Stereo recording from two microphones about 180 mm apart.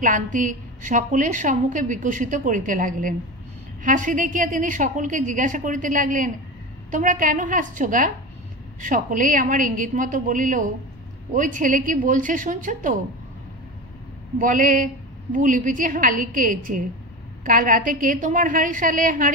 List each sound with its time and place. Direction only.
0.0 s a woman's voice: 45° right (ahead or behind)
14.4 s a woman's voice: 50° right (ahead or behind)